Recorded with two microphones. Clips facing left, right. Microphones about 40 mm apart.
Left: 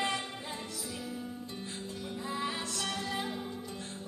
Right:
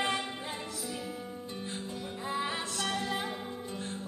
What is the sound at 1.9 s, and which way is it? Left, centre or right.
Music, centre.